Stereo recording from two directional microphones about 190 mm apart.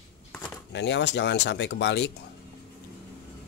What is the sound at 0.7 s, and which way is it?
Speech, 65° left (ahead or behind).